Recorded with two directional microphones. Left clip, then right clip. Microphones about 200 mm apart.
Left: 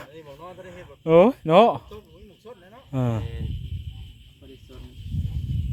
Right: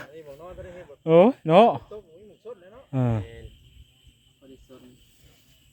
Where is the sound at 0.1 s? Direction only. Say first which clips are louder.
Left 1 dB; 40° left (ahead or behind).